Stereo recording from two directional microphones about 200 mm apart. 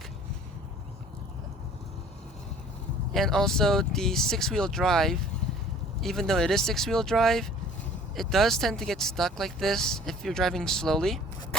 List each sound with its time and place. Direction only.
3.1 s speech: centre (ahead or behind)